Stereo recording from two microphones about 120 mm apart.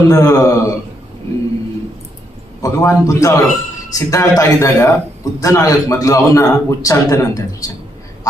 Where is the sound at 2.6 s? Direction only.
30° left (ahead or behind).